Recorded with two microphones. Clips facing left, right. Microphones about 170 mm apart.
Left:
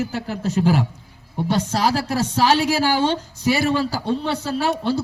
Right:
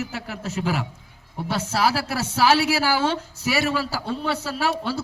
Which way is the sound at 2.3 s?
30° left (ahead or behind).